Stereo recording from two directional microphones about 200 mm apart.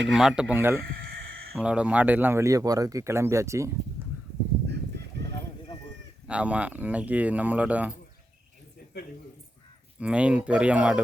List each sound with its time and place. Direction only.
0.0 s speech: centre (ahead or behind)
0.8 s speech: 50° right (ahead or behind)
1.5 s speech: 5° right (ahead or behind)
4.0 s a sound: 10° right (ahead or behind)
4.9 s fowl: 55° right (ahead or behind)
6.2 s speech: 5° right (ahead or behind)
10.0 s speech: 5° right (ahead or behind)